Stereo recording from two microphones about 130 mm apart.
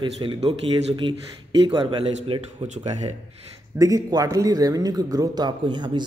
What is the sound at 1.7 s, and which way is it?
Speech, 40° right (ahead or behind).